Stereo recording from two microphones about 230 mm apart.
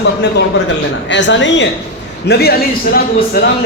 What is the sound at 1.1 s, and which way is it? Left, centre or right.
A man's voice, left.